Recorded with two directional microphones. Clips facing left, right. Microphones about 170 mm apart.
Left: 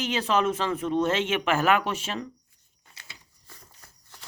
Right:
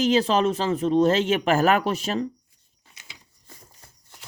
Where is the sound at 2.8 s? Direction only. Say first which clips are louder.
Even; 20° right (ahead or behind).